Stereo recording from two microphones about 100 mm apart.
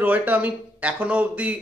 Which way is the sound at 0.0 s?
15° right (ahead or behind).